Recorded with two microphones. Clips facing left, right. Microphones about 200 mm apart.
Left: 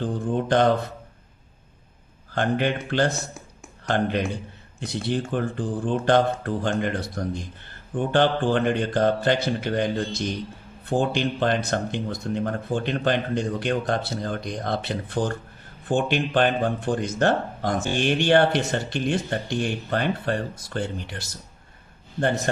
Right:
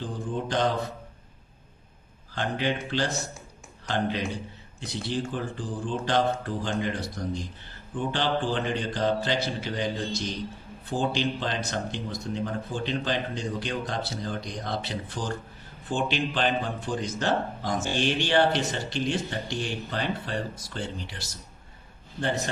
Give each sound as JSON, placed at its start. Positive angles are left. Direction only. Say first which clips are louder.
{"t": 0.0, "sound": "speech", "louder": "left 6 dB", "side_deg": 60}
{"t": 2.3, "sound": "speech", "louder": "left 5 dB", "side_deg": 55}